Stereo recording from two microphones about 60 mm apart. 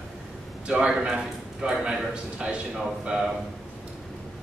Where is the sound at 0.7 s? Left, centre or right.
Centre.